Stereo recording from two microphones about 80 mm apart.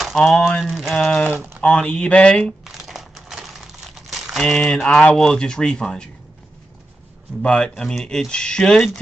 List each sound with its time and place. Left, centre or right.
0.2 s speech: centre
0.9 s speech: centre
1.3 s speech: right
1.6 s speech: centre
2.6 s crumpling: centre
5.1 s speech: centre
7.4 s speech: centre